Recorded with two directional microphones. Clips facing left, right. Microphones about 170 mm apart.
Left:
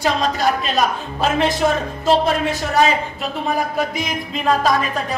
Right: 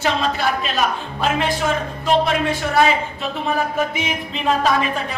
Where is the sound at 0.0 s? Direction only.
40° left (ahead or behind).